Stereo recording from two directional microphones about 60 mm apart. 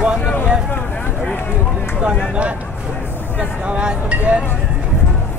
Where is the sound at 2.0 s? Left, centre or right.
Centre.